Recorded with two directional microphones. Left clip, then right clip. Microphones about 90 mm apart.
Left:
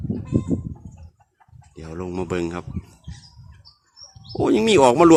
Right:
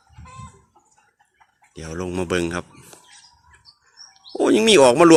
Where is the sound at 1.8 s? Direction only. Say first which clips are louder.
Right 3 dB; 10° right (ahead or behind).